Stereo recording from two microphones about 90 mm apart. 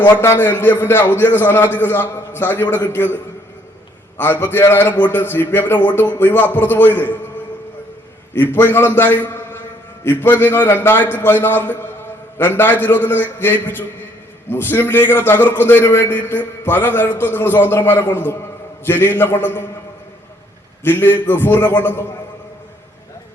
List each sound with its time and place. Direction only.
0.2 s a man's voice: 25° left (ahead or behind)
4.2 s a man's voice: 25° left (ahead or behind)
8.4 s a man's voice: 25° left (ahead or behind)
20.8 s a man's voice: 25° left (ahead or behind)